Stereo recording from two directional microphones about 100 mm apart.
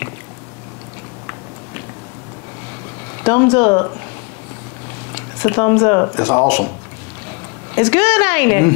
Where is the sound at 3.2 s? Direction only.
25° left (ahead or behind).